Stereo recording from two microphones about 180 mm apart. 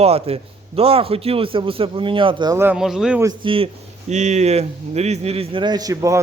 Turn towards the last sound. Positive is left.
turn(degrees=-20)  # may be behind; listen again after turning